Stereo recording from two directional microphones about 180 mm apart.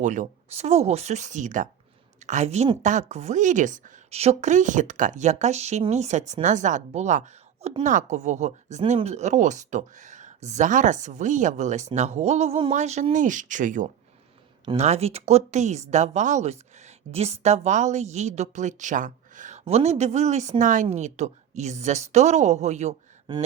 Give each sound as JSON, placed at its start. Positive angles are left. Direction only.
{"t": 0.0, "sound": "a woman's voice", "side_deg": -45}